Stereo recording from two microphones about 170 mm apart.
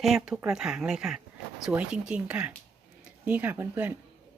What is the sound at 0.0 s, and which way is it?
Speech, 5° right (ahead or behind).